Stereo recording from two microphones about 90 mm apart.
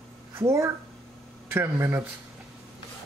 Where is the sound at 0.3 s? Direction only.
30° right (ahead or behind).